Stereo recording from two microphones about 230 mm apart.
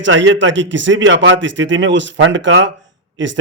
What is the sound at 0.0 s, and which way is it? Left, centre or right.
A man's voice, right.